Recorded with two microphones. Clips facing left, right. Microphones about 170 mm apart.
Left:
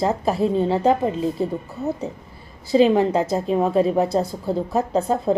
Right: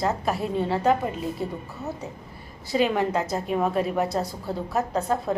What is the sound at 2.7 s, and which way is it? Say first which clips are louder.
A woman's voice: left 7 dB; 30° left (ahead or behind).